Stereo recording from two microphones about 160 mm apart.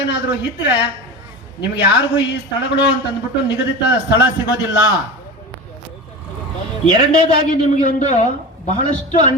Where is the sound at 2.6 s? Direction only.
90° left.